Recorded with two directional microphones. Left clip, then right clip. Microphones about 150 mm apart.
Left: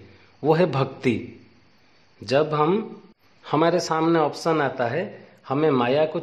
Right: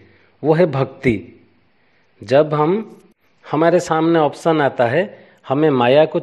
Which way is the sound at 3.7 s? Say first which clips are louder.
Right 6 dB; 45° right (ahead or behind).